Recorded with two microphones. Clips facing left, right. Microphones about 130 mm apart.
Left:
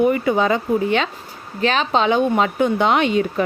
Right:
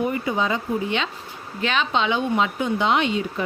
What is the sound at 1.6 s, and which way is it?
A woman's voice, 40° left (ahead or behind).